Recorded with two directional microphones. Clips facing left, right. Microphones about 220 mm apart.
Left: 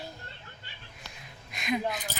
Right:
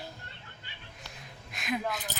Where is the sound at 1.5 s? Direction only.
Centre (ahead or behind).